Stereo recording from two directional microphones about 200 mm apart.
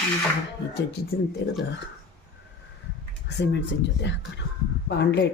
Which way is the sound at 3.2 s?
60° left (ahead or behind).